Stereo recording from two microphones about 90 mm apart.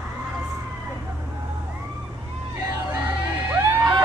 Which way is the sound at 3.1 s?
20° right (ahead or behind).